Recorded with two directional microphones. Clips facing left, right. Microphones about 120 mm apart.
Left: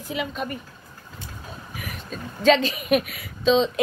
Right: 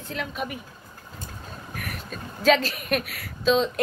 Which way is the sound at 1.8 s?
Centre (ahead or behind).